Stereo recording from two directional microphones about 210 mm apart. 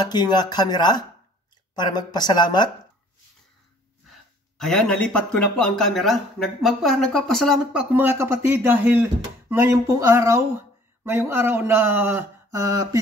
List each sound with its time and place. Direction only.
0.0 s speech: 20° left (ahead or behind)
4.6 s speech: 5° left (ahead or behind); by 13.0 s 15° right (ahead or behind)